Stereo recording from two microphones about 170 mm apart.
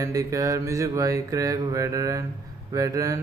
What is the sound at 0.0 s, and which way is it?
Mantra, 20° right (ahead or behind).